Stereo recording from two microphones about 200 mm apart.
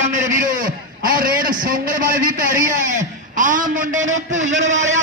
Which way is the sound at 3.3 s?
40° right (ahead or behind).